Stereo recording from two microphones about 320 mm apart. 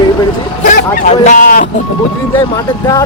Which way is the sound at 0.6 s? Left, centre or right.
Left.